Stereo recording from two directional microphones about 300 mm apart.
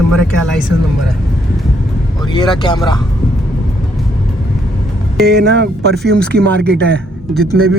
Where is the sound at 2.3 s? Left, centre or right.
Centre.